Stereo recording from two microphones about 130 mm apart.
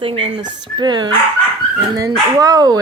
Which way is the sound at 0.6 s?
35° right (ahead or behind).